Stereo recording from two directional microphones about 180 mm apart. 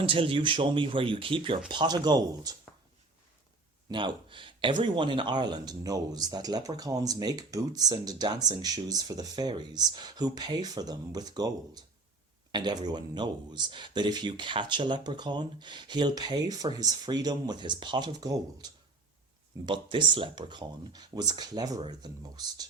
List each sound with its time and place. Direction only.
0.0 s speech: 30° right (ahead or behind)
3.8 s speech: 25° right (ahead or behind)